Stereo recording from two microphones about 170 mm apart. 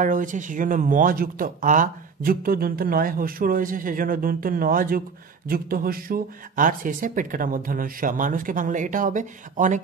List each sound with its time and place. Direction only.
0.0 s speech: 50° right (ahead or behind)